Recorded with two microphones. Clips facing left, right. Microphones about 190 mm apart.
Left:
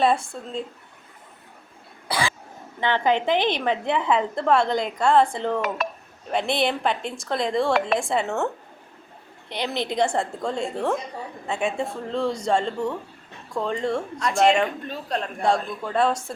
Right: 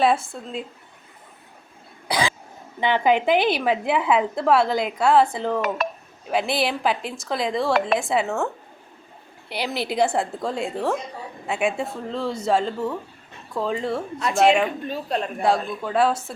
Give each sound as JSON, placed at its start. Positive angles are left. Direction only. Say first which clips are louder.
{"t": 0.0, "sound": "speech", "louder": "right 1 dB", "side_deg": -5}
{"t": 2.0, "sound": "cough", "louder": "right 2 dB", "side_deg": -15}
{"t": 2.8, "sound": "a woman's voice", "louder": "right 2 dB", "side_deg": -10}
{"t": 9.5, "sound": "speech", "louder": "even", "side_deg": -5}